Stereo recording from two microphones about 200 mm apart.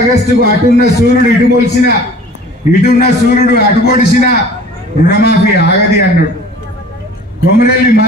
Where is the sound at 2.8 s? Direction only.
50° left (ahead or behind).